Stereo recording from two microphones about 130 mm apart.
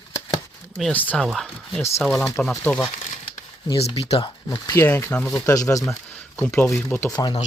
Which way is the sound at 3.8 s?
50° left (ahead or behind).